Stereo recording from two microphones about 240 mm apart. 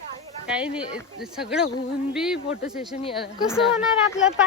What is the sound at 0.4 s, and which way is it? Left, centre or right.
Speech, centre.